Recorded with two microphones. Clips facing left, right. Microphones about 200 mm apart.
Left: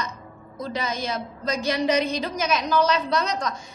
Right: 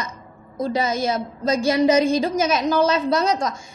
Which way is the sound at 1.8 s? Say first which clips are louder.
Right 7 dB; 45° right (ahead or behind).